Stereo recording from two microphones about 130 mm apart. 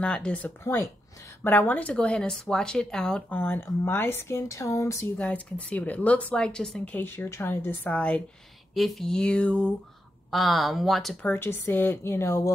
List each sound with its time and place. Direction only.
0.0 s speech: 10° left (ahead or behind)
5.1 s speech: 10° left (ahead or behind)
11.3 s speech: 15° left (ahead or behind)